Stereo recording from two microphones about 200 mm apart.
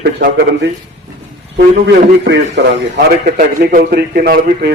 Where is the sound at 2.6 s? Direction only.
60° right (ahead or behind).